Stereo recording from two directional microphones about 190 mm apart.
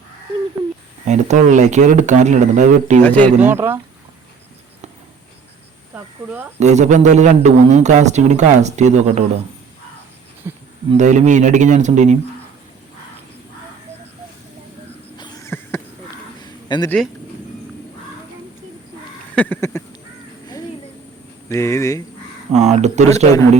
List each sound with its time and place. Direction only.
1.0 s a man's voice: 40° right (ahead or behind)
3.0 s speech: 10° left (ahead or behind)
3.4 s speech: 10° right (ahead or behind)
5.9 s speech: 10° right (ahead or behind)
6.6 s a man's voice: 35° right (ahead or behind)
10.4 s a sound: 15° right (ahead or behind)
10.9 s a man's voice: 40° right (ahead or behind)
15.4 s a sound: 15° left (ahead or behind)
16.6 s speech: 20° left (ahead or behind)
19.4 s speech: 10° left (ahead or behind)
21.5 s speech: 15° left (ahead or behind)
22.5 s a man's voice: 35° right (ahead or behind)